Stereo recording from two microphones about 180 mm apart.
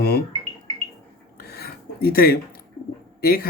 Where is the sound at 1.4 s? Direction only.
60° left (ahead or behind).